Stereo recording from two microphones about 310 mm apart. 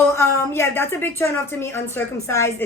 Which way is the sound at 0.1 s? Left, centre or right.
Centre.